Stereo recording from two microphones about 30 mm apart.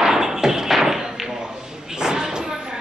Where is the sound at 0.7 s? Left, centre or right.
Centre.